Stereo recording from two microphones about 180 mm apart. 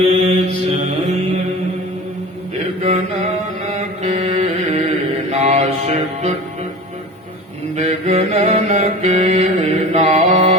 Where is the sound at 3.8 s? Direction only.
35° right (ahead or behind).